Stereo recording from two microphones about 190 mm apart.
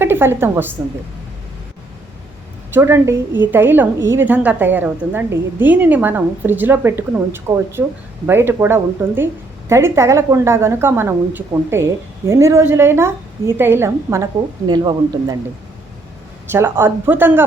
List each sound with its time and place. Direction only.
0.0 s a woman's voice: 10° right (ahead or behind)
2.7 s a woman's voice: 15° right (ahead or behind)
16.5 s a woman's voice: 10° right (ahead or behind)